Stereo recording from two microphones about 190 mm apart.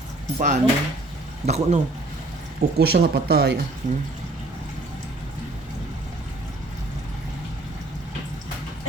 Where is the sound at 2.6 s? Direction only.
55° right (ahead or behind).